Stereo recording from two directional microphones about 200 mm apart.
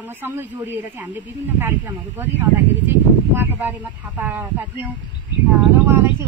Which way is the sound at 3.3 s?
10° right (ahead or behind).